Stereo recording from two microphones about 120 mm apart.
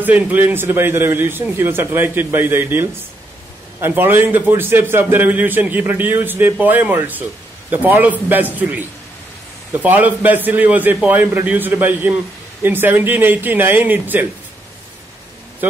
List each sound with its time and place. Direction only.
0.0 s a man's voice: 15° right (ahead or behind)